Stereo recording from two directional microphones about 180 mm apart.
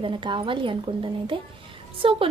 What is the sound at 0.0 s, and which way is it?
A woman's voice, 25° right (ahead or behind).